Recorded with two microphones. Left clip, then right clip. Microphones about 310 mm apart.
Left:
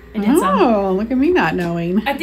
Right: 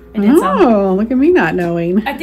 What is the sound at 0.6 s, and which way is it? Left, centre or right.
Speech, right.